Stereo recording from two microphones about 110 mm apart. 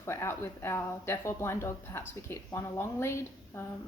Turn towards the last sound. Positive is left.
turn(degrees=25)  # may be behind; listen again after turning